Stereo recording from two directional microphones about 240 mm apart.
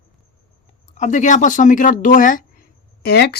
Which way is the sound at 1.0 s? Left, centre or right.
Left.